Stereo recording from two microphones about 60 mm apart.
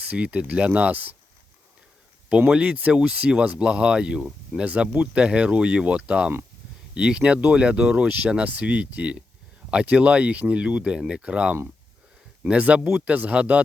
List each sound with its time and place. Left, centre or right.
0.0 s speech: right
2.5 s speech: right